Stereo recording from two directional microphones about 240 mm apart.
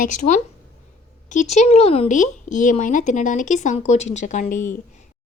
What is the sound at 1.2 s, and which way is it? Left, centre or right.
Speech, left.